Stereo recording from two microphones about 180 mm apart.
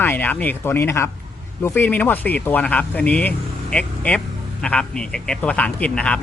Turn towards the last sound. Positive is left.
turn(degrees=5)  # may be behind; listen again after turning